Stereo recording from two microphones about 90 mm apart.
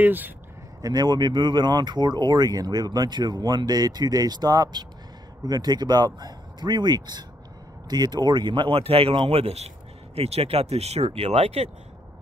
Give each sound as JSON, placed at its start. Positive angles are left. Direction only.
{"t": 0.0, "sound": "speech", "side_deg": -20}
{"t": 0.8, "sound": "speech", "side_deg": -50}